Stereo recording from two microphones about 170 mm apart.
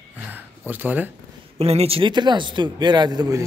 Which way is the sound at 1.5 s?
35° right (ahead or behind).